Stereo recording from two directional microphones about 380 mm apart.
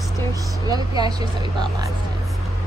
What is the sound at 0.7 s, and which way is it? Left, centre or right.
Speech, centre.